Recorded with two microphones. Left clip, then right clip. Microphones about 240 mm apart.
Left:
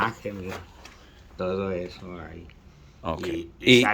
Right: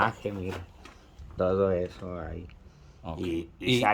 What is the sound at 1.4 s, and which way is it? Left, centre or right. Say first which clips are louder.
Speech: right 3 dB; right.